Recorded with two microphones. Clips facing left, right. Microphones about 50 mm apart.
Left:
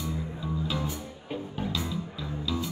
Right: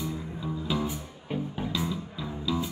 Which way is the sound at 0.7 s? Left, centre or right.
Centre.